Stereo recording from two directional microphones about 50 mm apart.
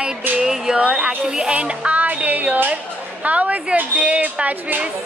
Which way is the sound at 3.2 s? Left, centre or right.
Right.